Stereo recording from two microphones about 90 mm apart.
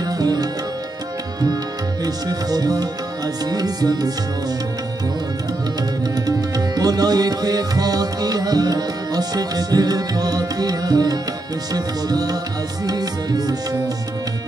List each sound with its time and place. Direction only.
0.0 s tabla: 45° right (ahead or behind)
2.0 s music: 45° right (ahead or behind)
6.1 s tabla: 45° right (ahead or behind)
11.7 s music: 45° right (ahead or behind)